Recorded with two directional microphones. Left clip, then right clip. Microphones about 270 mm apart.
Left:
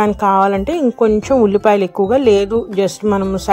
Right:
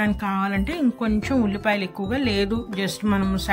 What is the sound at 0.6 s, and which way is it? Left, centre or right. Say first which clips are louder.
Speech: left 11 dB; centre.